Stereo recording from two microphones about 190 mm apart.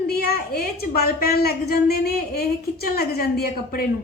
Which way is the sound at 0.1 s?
50° left (ahead or behind).